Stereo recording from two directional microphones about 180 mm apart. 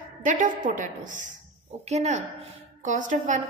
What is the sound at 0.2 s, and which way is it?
A woman's voice, 45° right (ahead or behind).